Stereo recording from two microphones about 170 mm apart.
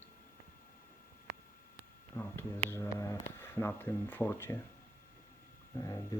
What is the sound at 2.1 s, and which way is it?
Speech, 10° left (ahead or behind).